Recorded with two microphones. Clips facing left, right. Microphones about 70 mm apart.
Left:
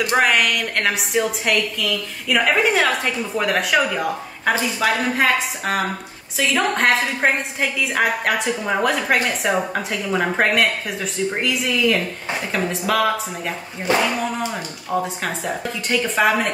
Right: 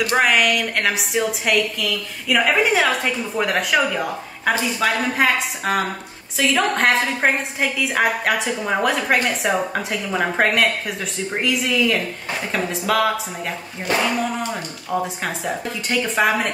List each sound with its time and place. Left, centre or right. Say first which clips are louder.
0.1 s a woman's voice: even; centre
14.5 s a woman's voice: even; centre